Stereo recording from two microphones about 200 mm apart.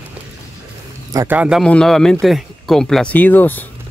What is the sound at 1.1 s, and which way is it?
Speech, 10° right (ahead or behind).